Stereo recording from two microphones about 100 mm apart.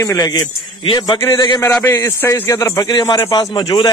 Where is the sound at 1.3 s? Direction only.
40° left (ahead or behind).